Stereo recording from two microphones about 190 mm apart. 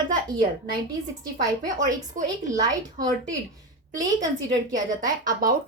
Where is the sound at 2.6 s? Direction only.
20° right (ahead or behind).